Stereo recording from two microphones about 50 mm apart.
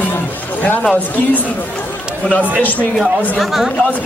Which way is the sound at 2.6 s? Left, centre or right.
Left.